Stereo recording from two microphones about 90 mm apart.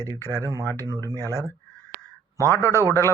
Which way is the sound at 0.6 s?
25° left (ahead or behind).